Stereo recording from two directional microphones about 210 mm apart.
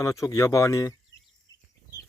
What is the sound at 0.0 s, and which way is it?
Speech, 15° left (ahead or behind).